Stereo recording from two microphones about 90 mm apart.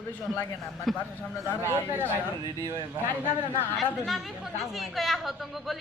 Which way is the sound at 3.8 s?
Centre (ahead or behind).